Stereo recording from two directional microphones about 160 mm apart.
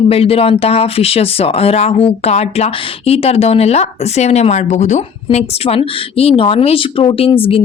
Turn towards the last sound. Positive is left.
turn(degrees=35)  # may be behind; listen again after turning